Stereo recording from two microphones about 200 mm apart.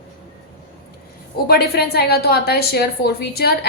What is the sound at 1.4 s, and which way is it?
A woman's voice, 50° left (ahead or behind).